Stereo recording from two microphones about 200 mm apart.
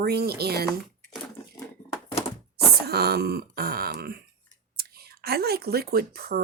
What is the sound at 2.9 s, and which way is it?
Speech, 50° right (ahead or behind).